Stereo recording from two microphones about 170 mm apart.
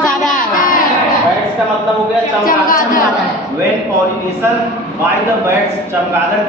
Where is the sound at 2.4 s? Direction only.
55° left (ahead or behind).